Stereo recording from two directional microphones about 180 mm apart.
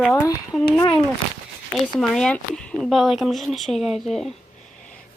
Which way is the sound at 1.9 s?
5° left (ahead or behind).